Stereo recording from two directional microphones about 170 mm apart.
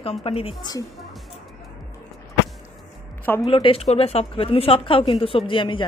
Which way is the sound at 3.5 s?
30° left (ahead or behind).